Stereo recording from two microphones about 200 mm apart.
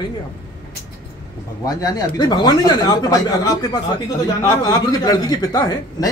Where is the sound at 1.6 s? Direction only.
20° left (ahead or behind).